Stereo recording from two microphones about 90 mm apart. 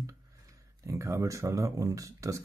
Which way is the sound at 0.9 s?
35° right (ahead or behind).